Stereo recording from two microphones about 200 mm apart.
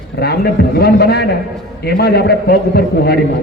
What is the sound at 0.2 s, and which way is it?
A man's voice, 55° left (ahead or behind).